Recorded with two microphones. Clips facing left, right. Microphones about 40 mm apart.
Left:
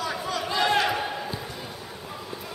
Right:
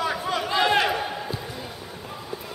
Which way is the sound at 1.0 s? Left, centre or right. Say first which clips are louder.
Right 1 dB; centre.